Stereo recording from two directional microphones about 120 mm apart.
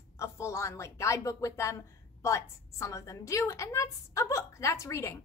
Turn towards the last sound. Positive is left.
turn(degrees=25)  # may be behind; listen again after turning